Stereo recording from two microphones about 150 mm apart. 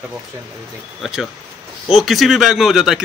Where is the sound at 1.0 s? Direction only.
Centre (ahead or behind).